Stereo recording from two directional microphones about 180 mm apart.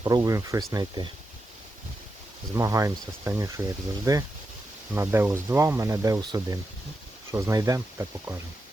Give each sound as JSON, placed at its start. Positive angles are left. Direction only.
{"t": 0.0, "sound": "speech", "side_deg": -20}
{"t": 2.6, "sound": "speech", "side_deg": -15}